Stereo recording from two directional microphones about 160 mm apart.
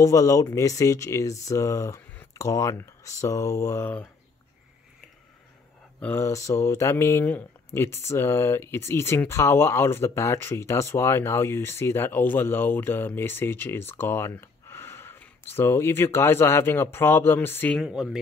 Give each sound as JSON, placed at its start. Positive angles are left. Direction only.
{"t": 0.0, "sound": "speech", "side_deg": 20}
{"t": 5.9, "sound": "speech", "side_deg": 10}
{"t": 17.7, "sound": "speech", "side_deg": -5}